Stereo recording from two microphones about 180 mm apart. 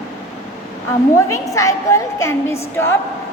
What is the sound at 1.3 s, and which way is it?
A woman's voice, 20° left (ahead or behind).